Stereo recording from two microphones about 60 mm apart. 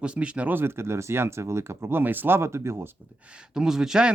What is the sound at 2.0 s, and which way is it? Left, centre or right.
Speech, right.